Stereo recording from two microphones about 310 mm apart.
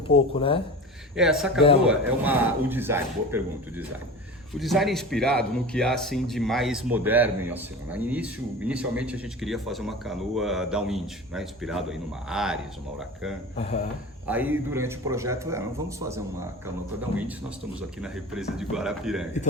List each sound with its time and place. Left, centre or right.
0.1 s speech: centre
1.1 s a man's voice: centre
14.3 s speech: centre
17.7 s a man's voice: centre